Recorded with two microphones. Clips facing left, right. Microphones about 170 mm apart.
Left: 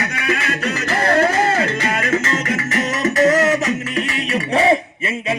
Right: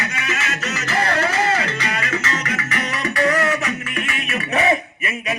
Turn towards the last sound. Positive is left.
turn(degrees=30)  # may be behind; listen again after turning